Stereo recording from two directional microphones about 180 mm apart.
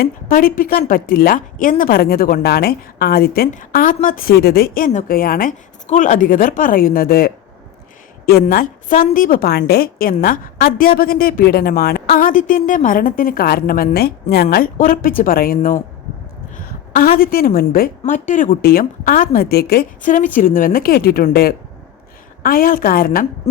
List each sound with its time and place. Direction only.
0.0 s a woman's voice: 50° left (ahead or behind)
16.6 s a sound: 45° left (ahead or behind)
17.2 s a woman's voice: 55° left (ahead or behind)